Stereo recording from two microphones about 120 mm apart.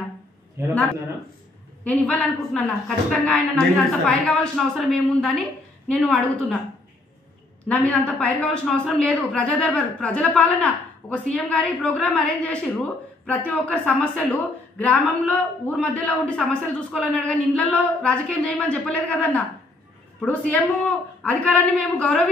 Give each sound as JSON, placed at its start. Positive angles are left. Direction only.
{"t": 1.9, "sound": "a woman's voice", "side_deg": 10}
{"t": 7.6, "sound": "a woman's voice", "side_deg": 10}